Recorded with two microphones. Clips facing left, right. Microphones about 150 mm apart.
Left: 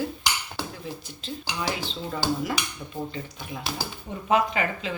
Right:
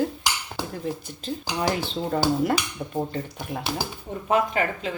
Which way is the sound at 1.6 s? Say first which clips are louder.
Right 5 dB; 50° right (ahead or behind).